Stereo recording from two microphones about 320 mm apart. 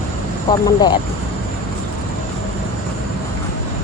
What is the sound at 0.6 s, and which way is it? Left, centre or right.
Speech, centre.